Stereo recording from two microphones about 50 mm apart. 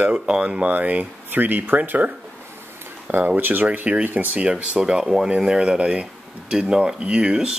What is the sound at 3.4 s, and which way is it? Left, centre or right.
Speech, right.